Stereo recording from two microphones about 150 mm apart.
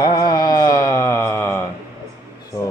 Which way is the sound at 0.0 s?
25° left (ahead or behind).